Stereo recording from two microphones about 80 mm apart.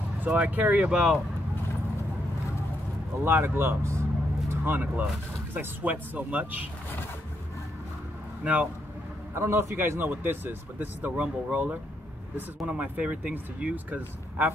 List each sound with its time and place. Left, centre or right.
0.2 s speech: centre
3.3 s speech: right
4.5 s speech: right
8.4 s speech: centre
9.3 s speech: right